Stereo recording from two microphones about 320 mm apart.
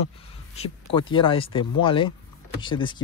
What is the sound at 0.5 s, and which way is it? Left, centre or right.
Speech, centre.